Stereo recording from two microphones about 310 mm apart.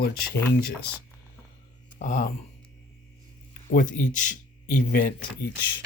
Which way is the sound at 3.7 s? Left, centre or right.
Left.